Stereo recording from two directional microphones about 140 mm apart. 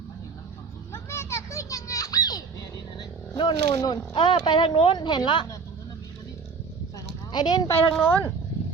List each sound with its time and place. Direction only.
0.9 s children playing: 20° left (ahead or behind)
3.0 s speech: 35° left (ahead or behind)
7.3 s speech: 30° left (ahead or behind)
8.0 s speech: 15° left (ahead or behind)